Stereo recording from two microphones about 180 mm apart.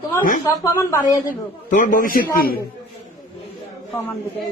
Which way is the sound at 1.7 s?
45° left (ahead or behind).